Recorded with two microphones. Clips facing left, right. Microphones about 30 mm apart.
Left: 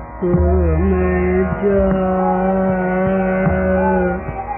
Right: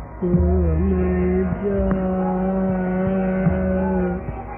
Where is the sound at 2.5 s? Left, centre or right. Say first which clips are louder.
Left 5 dB; centre.